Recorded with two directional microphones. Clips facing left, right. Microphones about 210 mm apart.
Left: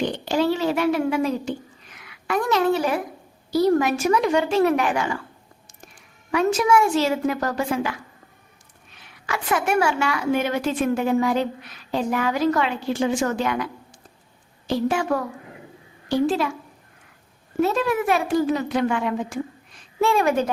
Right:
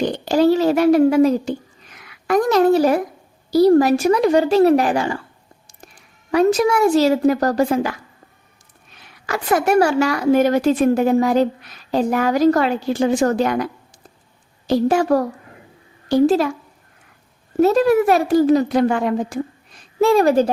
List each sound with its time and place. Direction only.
0.0 s a woman's voice: 40° right (ahead or behind)
6.3 s a woman's voice: 35° right (ahead or behind)
9.2 s a woman's voice: 40° right (ahead or behind)
14.7 s a woman's voice: 40° right (ahead or behind)
17.6 s a woman's voice: 40° right (ahead or behind)